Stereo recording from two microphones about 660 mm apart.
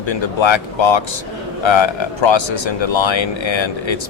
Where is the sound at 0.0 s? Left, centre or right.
Left.